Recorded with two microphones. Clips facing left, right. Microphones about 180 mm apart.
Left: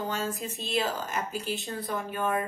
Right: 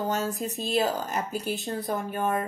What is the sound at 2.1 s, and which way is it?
Speech, 40° right (ahead or behind).